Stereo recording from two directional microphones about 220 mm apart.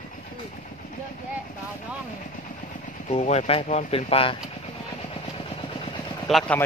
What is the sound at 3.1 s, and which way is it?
Speech, 30° left (ahead or behind).